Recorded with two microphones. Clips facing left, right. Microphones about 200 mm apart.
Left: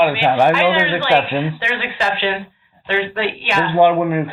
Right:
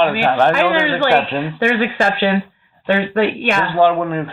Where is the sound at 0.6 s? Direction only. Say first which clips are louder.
Right 1 dB; 45° right (ahead or behind).